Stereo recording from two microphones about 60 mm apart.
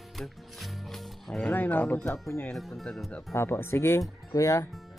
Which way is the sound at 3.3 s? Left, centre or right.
Left.